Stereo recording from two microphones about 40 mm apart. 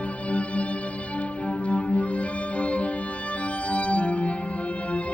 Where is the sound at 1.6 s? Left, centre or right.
Left.